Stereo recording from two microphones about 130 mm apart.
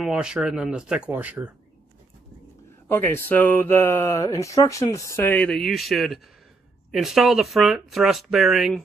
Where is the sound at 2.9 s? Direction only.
15° left (ahead or behind).